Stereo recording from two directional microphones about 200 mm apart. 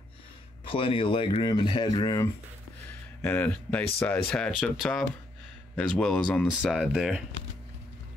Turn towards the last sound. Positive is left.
turn(degrees=0)  # may be behind; listen again after turning